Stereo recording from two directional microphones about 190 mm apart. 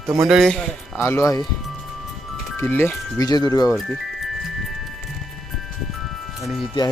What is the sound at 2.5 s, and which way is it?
Speech, 10° left (ahead or behind).